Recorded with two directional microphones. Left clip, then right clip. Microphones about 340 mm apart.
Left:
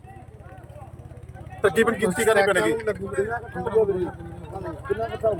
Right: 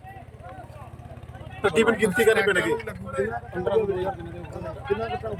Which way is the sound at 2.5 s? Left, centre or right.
Left.